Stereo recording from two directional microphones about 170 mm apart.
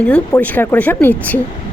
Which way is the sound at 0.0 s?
10° left (ahead or behind).